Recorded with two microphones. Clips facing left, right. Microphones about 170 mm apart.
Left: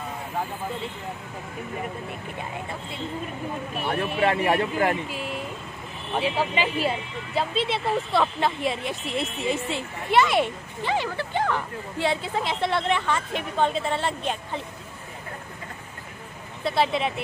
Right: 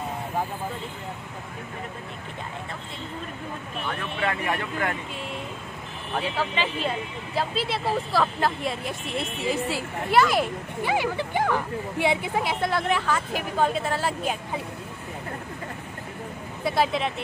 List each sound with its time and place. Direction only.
3.8 s speech: 35° left (ahead or behind)
5.1 s a woman's voice: 5° left (ahead or behind)
7.3 s a woman's voice: 5° right (ahead or behind)
10.8 s speech: 10° right (ahead or behind)
12.6 s a woman's voice: centre (ahead or behind)
16.6 s a woman's voice: centre (ahead or behind)